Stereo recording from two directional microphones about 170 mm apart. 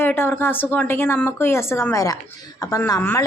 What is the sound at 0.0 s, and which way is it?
A woman's voice, 15° left (ahead or behind).